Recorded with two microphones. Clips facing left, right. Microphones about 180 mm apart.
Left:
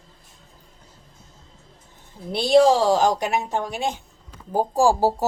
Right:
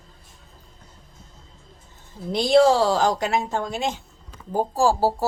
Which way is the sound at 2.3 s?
15° right (ahead or behind).